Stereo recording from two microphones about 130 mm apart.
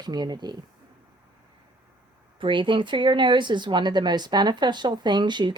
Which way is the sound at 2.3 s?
40° right (ahead or behind).